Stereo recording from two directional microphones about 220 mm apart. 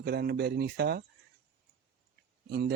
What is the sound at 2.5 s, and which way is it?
Speech, 45° right (ahead or behind).